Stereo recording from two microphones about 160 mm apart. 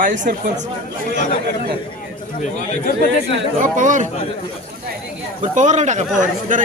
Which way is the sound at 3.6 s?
55° right (ahead or behind).